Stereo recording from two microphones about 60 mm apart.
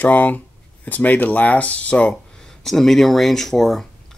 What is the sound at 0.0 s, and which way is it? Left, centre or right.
Speech, left.